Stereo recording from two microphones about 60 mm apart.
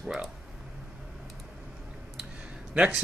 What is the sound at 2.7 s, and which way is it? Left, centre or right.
Speech, centre.